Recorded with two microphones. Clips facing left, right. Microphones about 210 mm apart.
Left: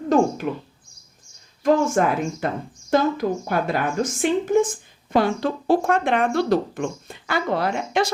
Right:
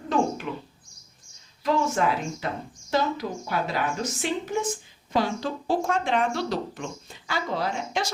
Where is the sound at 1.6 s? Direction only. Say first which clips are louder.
Left 6 dB; 50° left (ahead or behind).